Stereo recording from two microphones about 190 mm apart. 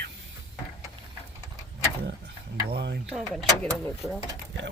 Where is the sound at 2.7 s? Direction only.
65° right (ahead or behind).